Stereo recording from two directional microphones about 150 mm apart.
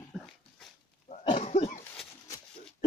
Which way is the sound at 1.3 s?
45° left (ahead or behind).